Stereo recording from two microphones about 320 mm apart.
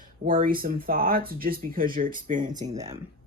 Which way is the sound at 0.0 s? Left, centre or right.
Right.